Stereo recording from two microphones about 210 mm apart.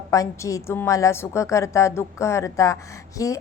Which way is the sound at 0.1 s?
15° left (ahead or behind).